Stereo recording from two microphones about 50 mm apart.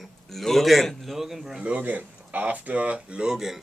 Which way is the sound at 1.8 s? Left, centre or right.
Right.